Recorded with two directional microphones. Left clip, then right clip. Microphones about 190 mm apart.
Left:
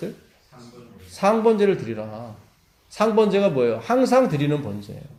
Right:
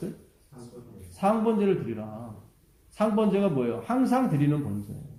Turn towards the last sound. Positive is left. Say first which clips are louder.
# left 8 dB
turn(degrees=25)  # may be behind; listen again after turning